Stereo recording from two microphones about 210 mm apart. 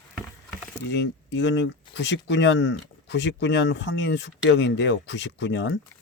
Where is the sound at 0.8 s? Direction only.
60° left (ahead or behind).